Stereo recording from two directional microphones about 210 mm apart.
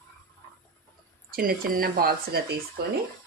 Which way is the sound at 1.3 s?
45° right (ahead or behind).